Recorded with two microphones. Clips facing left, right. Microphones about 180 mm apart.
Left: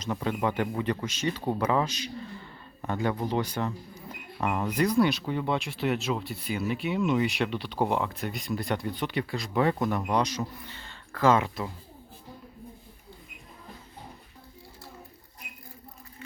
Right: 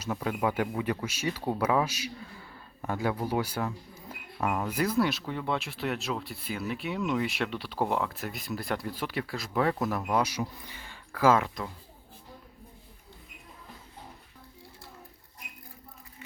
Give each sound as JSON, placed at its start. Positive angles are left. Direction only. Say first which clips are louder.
{"t": 0.0, "sound": "speech", "louder": "left 1 dB", "side_deg": -5}